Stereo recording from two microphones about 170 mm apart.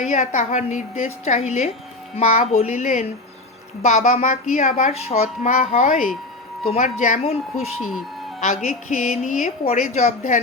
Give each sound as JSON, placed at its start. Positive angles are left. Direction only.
{"t": 0.0, "sound": "speech", "side_deg": 45}
{"t": 8.4, "sound": "speech", "side_deg": 50}